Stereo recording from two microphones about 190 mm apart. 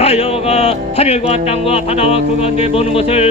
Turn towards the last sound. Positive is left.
turn(degrees=30)  # may be behind; listen again after turning